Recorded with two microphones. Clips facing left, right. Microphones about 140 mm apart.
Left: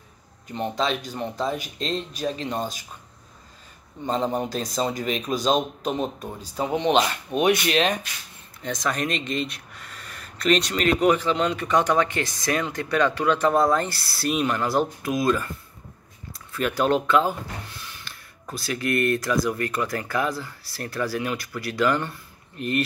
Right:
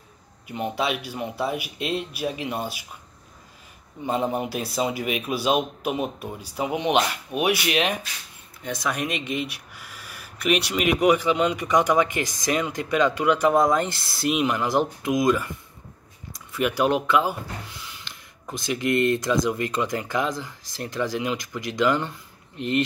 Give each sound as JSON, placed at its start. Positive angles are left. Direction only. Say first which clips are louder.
{"t": 0.5, "sound": "speech", "louder": "left 1 dB", "side_deg": -10}
{"t": 4.0, "sound": "speech", "louder": "even", "side_deg": -10}